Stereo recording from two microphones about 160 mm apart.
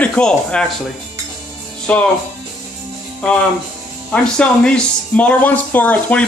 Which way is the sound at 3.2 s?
5° left (ahead or behind).